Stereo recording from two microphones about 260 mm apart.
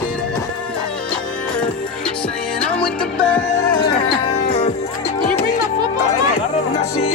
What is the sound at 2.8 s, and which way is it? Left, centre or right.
Music, centre.